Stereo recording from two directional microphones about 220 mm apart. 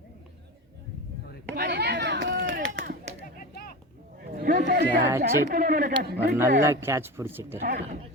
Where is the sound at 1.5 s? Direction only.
50° right (ahead or behind).